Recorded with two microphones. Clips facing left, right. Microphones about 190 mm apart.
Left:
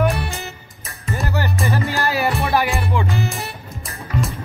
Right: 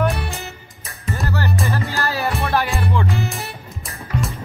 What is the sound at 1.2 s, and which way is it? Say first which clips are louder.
Music: even; 15° left (ahead or behind).